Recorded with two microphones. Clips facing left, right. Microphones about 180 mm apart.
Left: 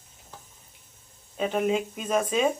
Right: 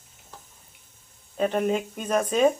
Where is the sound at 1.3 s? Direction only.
Centre (ahead or behind).